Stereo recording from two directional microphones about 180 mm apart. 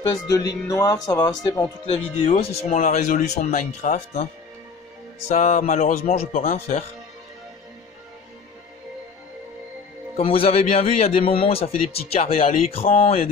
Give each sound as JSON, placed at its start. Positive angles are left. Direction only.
{"t": 0.0, "sound": "speech", "side_deg": 20}
{"t": 1.9, "sound": "speech", "side_deg": 35}
{"t": 5.3, "sound": "music", "side_deg": 45}
{"t": 6.0, "sound": "speech", "side_deg": 35}
{"t": 10.1, "sound": "speech", "side_deg": 30}